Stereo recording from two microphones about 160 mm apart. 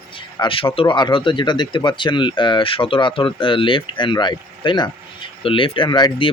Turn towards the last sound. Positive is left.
turn(degrees=30)  # may be behind; listen again after turning